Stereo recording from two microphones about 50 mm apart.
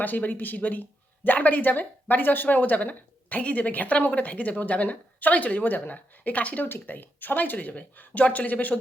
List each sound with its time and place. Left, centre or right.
0.0 s speech: left
6.7 s speech: left